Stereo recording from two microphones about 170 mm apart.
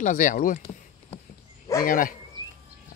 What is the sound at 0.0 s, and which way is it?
Speech, 50° left (ahead or behind).